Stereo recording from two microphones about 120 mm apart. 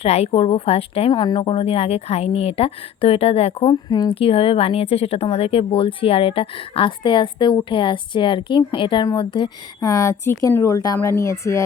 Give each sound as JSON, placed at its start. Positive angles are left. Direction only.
{"t": 0.0, "sound": "speech", "side_deg": 60}
{"t": 3.8, "sound": "speech", "side_deg": 35}
{"t": 4.1, "sound": "speech", "side_deg": 50}